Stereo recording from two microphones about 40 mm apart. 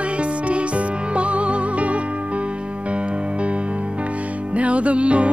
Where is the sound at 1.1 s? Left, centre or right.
Right.